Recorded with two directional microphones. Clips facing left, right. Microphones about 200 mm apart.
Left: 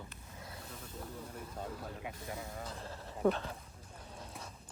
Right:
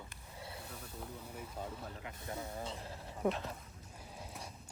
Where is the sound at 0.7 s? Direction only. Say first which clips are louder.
Left 1 dB; 5° right (ahead or behind).